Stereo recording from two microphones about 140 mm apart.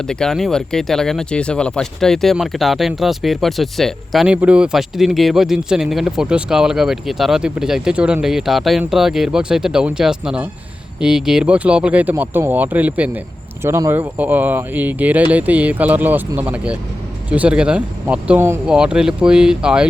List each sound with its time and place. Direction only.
0.1 s a man's voice: 5° left (ahead or behind); by 18.6 s 15° right (ahead or behind)
18.6 s a man's voice: 5° right (ahead or behind)